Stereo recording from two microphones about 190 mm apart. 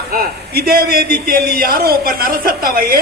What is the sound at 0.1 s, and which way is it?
A man's voice, 55° right (ahead or behind).